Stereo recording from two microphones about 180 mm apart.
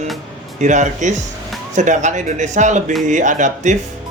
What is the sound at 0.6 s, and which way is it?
Speech, 40° right (ahead or behind).